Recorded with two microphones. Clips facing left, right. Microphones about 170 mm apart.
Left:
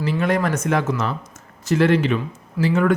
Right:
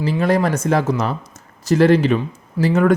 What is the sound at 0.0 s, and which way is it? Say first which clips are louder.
Speech: right 3 dB; 35° right (ahead or behind).